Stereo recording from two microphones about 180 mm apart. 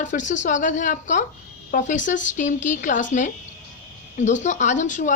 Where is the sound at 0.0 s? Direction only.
45° left (ahead or behind).